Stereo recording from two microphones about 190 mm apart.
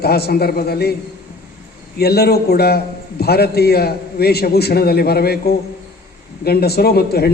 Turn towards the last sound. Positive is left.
turn(degrees=55)  # may be behind; listen again after turning